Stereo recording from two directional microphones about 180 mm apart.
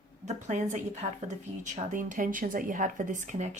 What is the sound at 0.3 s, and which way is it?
Speech, 40° right (ahead or behind).